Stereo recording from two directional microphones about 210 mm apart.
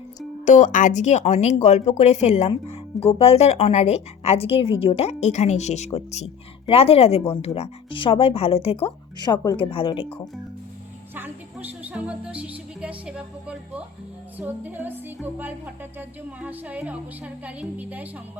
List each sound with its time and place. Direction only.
0.4 s speech: 35° left (ahead or behind)
11.1 s music: 10° right (ahead or behind)